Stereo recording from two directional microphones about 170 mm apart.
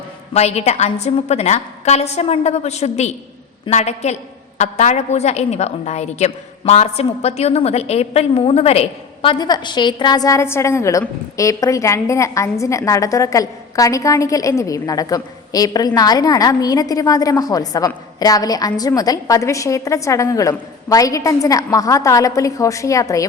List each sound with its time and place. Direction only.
0.3 s a woman's voice: 40° left (ahead or behind); by 23.2 s 20° left (ahead or behind)